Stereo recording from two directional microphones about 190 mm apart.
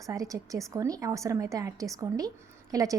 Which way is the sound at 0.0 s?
15° right (ahead or behind).